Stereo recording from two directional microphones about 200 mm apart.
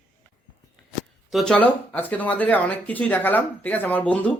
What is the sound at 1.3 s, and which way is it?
Speech, centre (ahead or behind).